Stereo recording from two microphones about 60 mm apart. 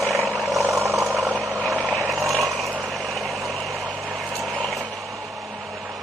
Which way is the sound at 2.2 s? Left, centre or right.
Centre.